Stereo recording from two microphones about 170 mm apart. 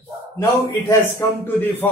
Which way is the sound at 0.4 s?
15° left (ahead or behind).